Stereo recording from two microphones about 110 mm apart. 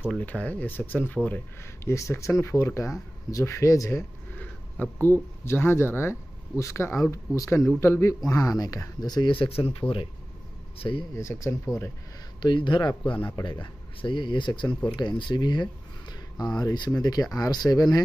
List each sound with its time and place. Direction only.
0.1 s speech: 15° left (ahead or behind)
1.9 s speech: 25° left (ahead or behind)
4.8 s speech: 15° left (ahead or behind)
7.5 s a man's voice: centre (ahead or behind)
7.8 s speech: 25° left (ahead or behind); by 11.1 s 50° left (ahead or behind)
11.1 s speech: 25° left (ahead or behind)
12.4 s speech: 45° left (ahead or behind)